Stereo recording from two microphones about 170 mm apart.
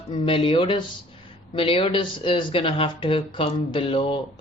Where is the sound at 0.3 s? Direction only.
30° left (ahead or behind).